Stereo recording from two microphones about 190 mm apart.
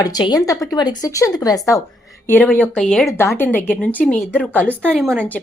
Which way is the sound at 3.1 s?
15° left (ahead or behind).